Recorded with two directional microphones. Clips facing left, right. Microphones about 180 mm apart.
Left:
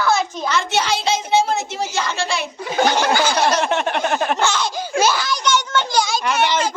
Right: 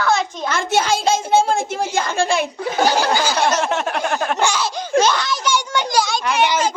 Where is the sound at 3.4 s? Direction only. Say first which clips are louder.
Left 1 dB; centre (ahead or behind).